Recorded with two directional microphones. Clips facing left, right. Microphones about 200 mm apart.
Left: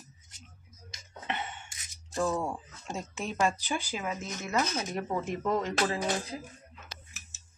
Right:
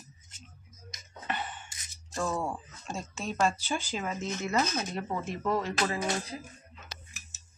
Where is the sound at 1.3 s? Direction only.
20° left (ahead or behind).